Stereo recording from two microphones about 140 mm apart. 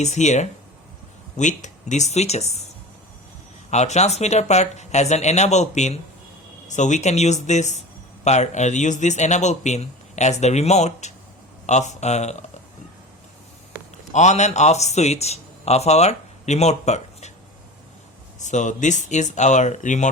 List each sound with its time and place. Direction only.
0.0 s a man's voice: 55° left (ahead or behind)
3.7 s a man's voice: 55° left (ahead or behind)
14.1 s speech: 55° left (ahead or behind)
18.3 s a man's voice: 60° left (ahead or behind)